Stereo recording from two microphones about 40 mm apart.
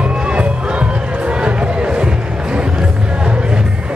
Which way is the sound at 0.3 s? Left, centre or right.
Right.